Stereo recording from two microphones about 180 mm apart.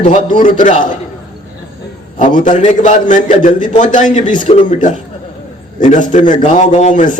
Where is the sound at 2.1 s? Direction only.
45° left (ahead or behind).